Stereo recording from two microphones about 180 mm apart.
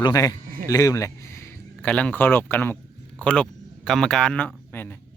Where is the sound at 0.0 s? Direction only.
20° left (ahead or behind).